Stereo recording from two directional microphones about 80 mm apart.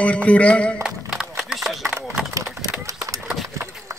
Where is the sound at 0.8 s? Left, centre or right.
Centre.